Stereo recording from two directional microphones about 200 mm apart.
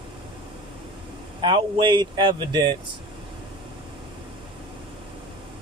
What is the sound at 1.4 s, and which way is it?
Speech, 25° right (ahead or behind).